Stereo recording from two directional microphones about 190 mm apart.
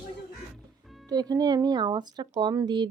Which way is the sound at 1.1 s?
20° right (ahead or behind).